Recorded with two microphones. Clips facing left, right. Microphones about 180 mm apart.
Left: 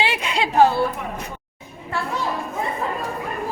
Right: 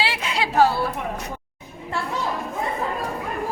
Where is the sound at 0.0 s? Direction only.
20° left (ahead or behind).